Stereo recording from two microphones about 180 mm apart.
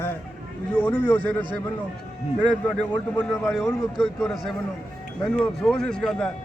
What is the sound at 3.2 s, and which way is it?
A man's voice, 5° left (ahead or behind).